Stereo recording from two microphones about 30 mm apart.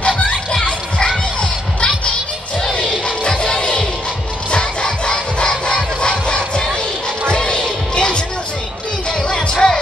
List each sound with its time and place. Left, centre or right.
3.5 s music: left
4.5 s crowd: left
7.2 s music: left
9.3 s music: left